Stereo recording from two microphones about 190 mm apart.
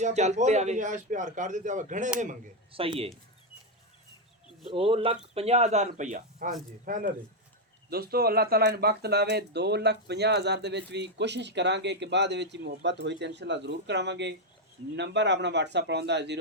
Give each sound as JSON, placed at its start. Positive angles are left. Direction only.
{"t": 0.0, "sound": "a man's voice", "side_deg": -35}
{"t": 2.7, "sound": "speech", "side_deg": -30}
{"t": 4.6, "sound": "a man's voice", "side_deg": -30}